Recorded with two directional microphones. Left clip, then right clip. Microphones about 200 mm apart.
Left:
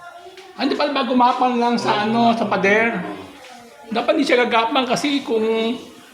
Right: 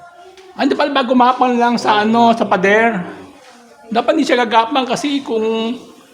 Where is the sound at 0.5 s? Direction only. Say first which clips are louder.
Right 5 dB; 40° right (ahead or behind).